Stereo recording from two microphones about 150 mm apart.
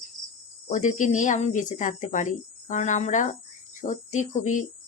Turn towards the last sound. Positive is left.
turn(degrees=55)  # may be behind; listen again after turning